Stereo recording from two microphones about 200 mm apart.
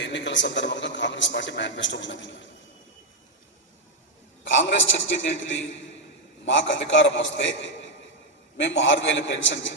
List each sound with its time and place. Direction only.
0.0 s a man's voice: 65° left (ahead or behind)
4.7 s a man's voice: 65° left (ahead or behind)